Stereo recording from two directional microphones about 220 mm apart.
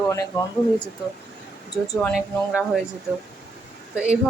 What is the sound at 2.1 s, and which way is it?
Speech, 5° right (ahead or behind).